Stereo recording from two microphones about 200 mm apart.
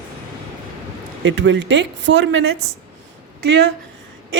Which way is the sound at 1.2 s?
65° right (ahead or behind).